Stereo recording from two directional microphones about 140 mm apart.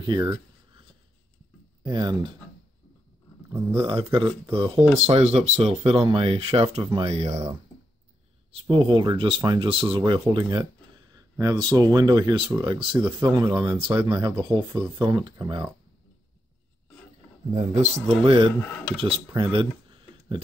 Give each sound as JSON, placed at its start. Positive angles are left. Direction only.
{"t": 0.0, "sound": "speech", "side_deg": -30}
{"t": 1.8, "sound": "speech", "side_deg": -30}
{"t": 3.8, "sound": "speech", "side_deg": -35}
{"t": 5.0, "sound": "speech", "side_deg": -45}
{"t": 8.5, "sound": "speech", "side_deg": -40}
{"t": 14.6, "sound": "speech", "side_deg": -15}
{"t": 15.0, "sound": "speech", "side_deg": -30}
{"t": 17.6, "sound": "speech", "side_deg": -60}
{"t": 18.2, "sound": "speech", "side_deg": -40}